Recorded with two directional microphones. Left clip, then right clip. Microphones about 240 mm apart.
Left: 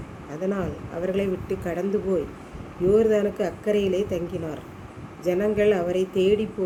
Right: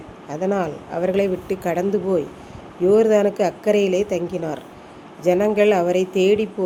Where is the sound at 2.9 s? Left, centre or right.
Centre.